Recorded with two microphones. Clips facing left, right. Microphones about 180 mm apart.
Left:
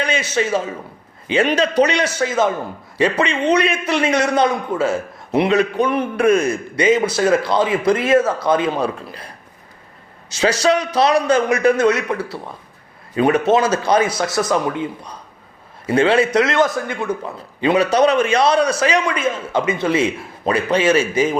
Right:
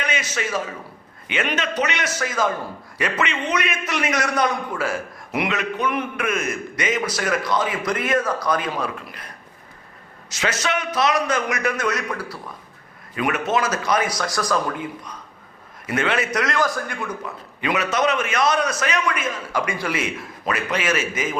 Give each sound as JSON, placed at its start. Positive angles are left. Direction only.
{"t": 0.0, "sound": "a man's voice", "side_deg": 30}